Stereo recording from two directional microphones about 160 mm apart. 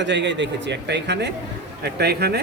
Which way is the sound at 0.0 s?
90° right.